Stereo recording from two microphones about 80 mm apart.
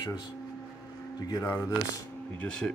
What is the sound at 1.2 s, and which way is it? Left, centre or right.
Speech, left.